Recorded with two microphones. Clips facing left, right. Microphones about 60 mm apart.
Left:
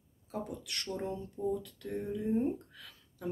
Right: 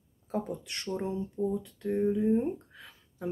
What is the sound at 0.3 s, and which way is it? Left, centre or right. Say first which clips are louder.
Speech: right 5 dB; right.